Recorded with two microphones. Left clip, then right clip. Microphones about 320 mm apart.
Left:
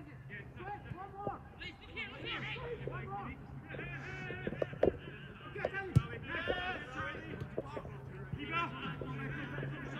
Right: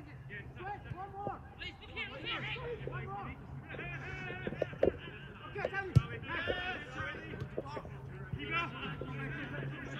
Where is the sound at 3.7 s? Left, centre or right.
Centre.